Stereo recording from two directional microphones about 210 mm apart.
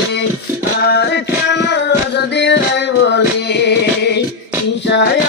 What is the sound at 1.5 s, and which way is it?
Music, 55° left (ahead or behind).